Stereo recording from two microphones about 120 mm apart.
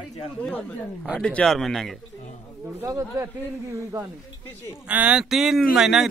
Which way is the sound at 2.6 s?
15° right (ahead or behind).